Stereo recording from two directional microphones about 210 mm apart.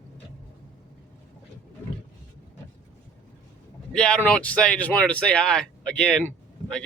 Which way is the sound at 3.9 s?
5° left (ahead or behind).